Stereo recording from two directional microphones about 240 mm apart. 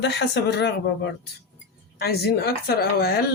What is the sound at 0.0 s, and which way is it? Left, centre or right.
Speech, left.